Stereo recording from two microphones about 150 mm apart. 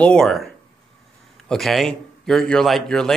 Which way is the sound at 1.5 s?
Centre (ahead or behind).